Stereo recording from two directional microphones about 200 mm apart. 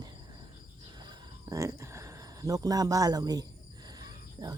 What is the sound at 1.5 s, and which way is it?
Speech, 15° right (ahead or behind).